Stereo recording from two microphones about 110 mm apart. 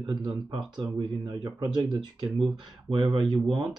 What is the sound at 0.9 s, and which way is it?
Speech, 35° right (ahead or behind).